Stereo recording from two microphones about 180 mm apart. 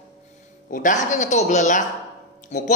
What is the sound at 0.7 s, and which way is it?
Speech, 50° left (ahead or behind).